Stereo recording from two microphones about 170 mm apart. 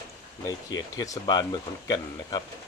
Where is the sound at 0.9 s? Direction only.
20° left (ahead or behind).